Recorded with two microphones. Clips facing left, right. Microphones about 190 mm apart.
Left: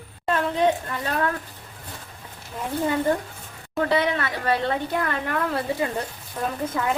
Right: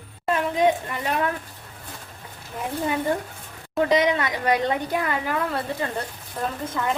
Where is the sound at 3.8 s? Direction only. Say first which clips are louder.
Right 2 dB; 15° right (ahead or behind).